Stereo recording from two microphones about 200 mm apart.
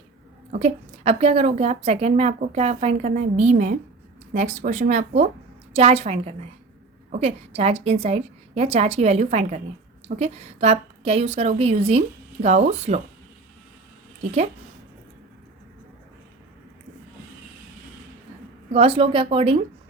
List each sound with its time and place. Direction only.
0.5 s a woman's voice: 35° right (ahead or behind)
18.7 s a woman's voice: 30° right (ahead or behind)